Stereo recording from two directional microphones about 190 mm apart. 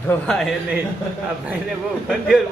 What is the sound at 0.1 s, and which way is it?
Speech, 5° left (ahead or behind).